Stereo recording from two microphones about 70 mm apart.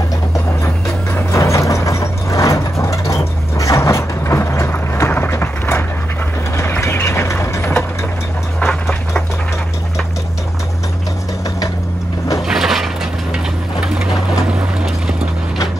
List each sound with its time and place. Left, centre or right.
1.3 s vehicle: left
12.4 s mechanisms: centre